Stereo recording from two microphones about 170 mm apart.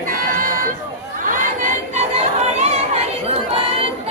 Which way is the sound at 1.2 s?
50° right (ahead or behind).